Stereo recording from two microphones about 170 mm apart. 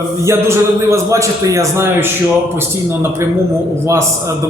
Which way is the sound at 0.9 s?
20° right (ahead or behind).